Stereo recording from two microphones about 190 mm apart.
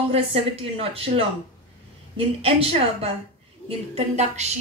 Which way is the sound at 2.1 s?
30° right (ahead or behind).